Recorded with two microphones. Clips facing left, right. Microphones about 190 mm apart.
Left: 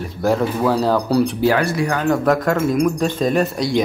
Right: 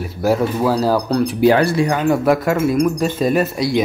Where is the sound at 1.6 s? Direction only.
35° right (ahead or behind).